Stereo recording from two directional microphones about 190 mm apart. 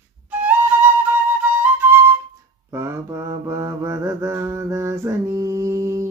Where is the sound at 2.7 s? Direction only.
15° right (ahead or behind).